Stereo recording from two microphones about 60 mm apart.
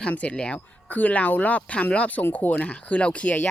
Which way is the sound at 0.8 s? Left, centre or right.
Left.